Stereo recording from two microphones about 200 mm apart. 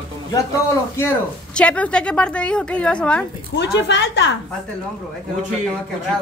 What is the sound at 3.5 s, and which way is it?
Speech, 60° left (ahead or behind).